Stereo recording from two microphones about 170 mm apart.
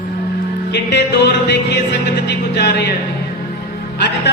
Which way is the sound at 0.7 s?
80° left.